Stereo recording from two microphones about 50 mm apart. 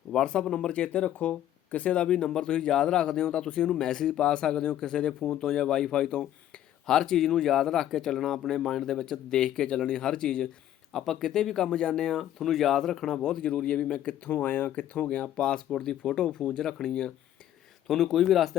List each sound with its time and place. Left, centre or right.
0.1 s speech: centre
12.1 s a man's voice: centre; by 14.2 s left
14.3 s speech: left
15.0 s speech: centre
17.8 s speech: centre